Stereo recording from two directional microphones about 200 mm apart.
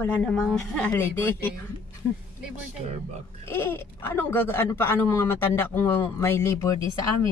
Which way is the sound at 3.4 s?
10° left (ahead or behind).